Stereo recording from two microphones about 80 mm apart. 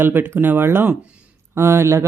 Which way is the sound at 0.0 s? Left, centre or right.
Right.